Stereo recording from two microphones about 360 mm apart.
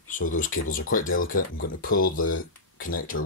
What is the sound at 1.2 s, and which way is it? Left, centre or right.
Speech, left.